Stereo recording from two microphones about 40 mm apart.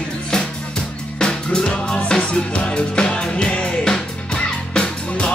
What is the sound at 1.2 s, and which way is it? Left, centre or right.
Music, left.